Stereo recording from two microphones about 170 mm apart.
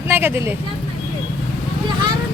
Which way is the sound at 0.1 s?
10° right (ahead or behind).